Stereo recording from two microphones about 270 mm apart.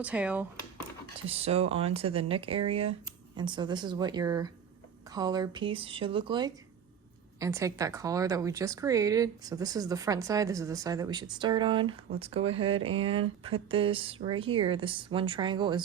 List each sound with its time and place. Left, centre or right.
0.0 s speech: centre
1.2 s speech: right